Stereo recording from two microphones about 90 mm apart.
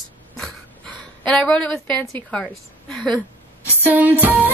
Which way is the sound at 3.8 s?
20° right (ahead or behind).